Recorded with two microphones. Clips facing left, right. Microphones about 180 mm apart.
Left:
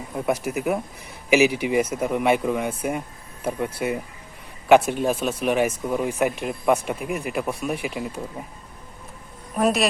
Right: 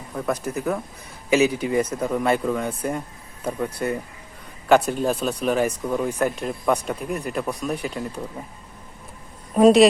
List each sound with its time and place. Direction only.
0.3 s speech: 15° left (ahead or behind)
9.6 s a woman's voice: 25° right (ahead or behind)